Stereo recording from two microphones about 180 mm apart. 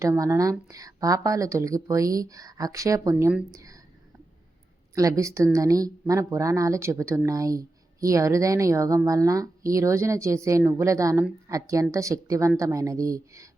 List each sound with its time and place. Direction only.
0.0 s speech: 15° right (ahead or behind)
4.9 s speech: 20° right (ahead or behind)